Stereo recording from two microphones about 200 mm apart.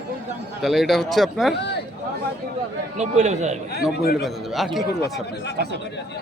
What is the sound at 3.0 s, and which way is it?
Speech, 35° right (ahead or behind).